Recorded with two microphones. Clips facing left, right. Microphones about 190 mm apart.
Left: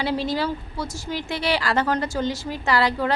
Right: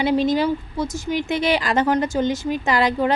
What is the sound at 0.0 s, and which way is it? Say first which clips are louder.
Speech: right 6 dB; 20° right (ahead or behind).